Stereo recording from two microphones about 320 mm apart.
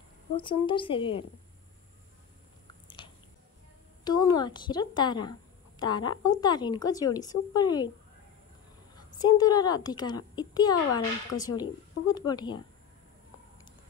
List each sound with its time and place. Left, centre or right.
0.4 s a child's voice: centre
4.0 s a child's voice: centre
8.9 s a child's voice: centre